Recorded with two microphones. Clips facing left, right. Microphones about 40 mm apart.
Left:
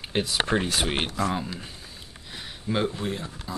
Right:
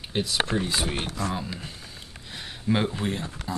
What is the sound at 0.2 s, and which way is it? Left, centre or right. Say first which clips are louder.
Speech: left 1 dB; left.